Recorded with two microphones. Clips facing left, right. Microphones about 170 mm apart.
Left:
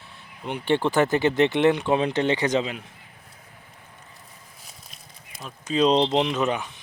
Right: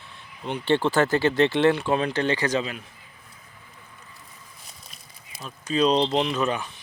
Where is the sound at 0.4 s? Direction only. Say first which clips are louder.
Even; 15° left (ahead or behind).